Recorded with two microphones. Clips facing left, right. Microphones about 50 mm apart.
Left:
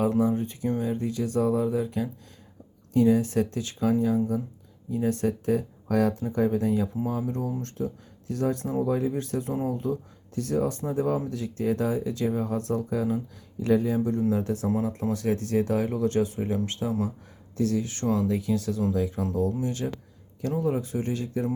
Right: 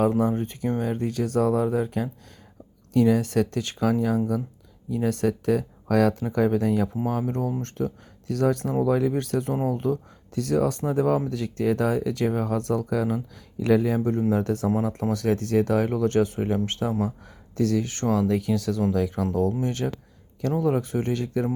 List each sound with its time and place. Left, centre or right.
0.2 s speech: right
2.9 s speech: right
14.1 s speech: right
14.4 s speech: right
17.6 s speech: right